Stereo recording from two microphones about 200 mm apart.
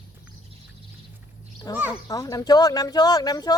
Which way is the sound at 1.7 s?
20° left (ahead or behind).